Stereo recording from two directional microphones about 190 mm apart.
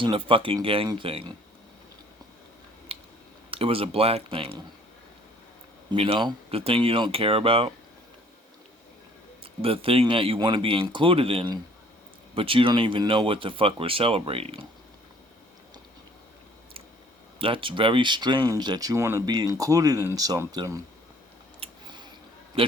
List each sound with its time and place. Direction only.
0.0 s speech: 25° right (ahead or behind)
2.9 s a sound: 30° right (ahead or behind)
3.5 s speech: 30° right (ahead or behind)
5.9 s speech: 25° right (ahead or behind)
9.4 s speech: 30° right (ahead or behind)
17.4 s speech: 25° right (ahead or behind)
21.6 s a sound: 25° right (ahead or behind)
22.6 s a man's voice: 30° right (ahead or behind)